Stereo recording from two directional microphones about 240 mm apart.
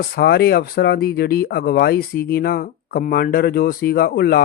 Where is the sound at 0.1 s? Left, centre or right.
Left.